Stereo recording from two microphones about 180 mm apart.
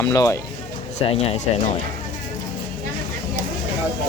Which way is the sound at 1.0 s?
35° left (ahead or behind).